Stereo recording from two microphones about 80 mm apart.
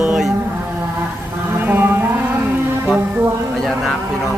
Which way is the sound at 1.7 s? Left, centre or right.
Right.